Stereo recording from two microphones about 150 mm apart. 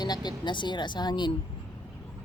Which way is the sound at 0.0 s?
30° left (ahead or behind).